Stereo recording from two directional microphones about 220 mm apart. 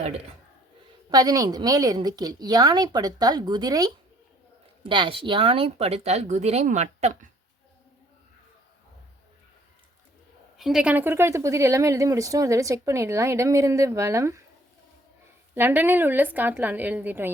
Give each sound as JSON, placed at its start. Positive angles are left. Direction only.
{"t": 1.1, "sound": "speech", "side_deg": -15}
{"t": 10.6, "sound": "speech", "side_deg": -5}
{"t": 15.5, "sound": "speech", "side_deg": -10}